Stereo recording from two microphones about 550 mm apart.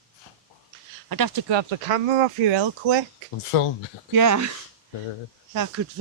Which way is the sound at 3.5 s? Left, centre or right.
Left.